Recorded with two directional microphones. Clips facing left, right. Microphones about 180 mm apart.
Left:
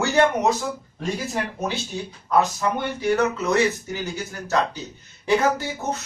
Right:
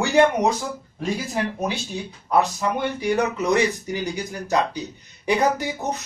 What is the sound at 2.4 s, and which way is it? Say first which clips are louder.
Speech: even; 15° right (ahead or behind).